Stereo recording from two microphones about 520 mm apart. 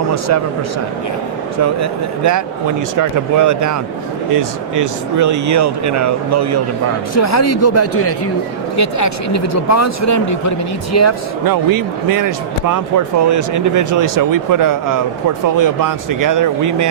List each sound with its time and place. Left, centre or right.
1.6 s speech: right
7.2 s a man's voice: left
11.4 s speech: right